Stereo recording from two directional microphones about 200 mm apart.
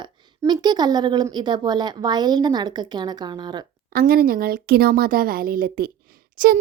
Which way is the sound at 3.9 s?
45° right (ahead or behind).